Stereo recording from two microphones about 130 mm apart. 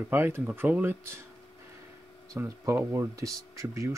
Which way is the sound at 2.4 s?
20° right (ahead or behind).